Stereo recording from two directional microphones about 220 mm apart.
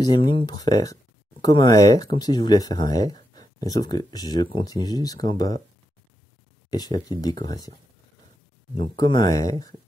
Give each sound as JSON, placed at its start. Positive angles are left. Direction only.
{"t": 0.0, "sound": "speech", "side_deg": 20}
{"t": 6.7, "sound": "speech", "side_deg": 20}
{"t": 8.9, "sound": "speech", "side_deg": 20}